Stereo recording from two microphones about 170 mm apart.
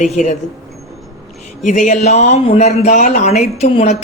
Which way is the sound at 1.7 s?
45° left (ahead or behind).